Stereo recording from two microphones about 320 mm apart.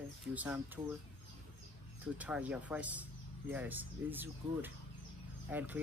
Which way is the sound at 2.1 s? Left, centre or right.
Centre.